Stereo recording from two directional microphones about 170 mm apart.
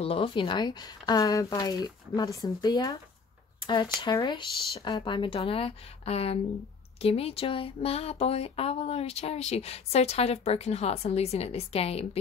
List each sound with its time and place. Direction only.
0.0 s speech: 35° left (ahead or behind)